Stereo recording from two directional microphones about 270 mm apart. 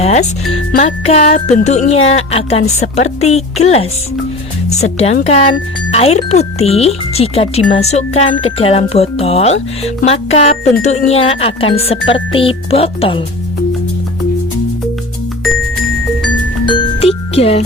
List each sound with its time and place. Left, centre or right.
0.0 s speech: left
4.9 s speech: left
16.6 s music: centre